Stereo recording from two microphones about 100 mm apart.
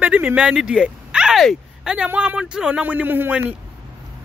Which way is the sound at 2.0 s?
15° right (ahead or behind).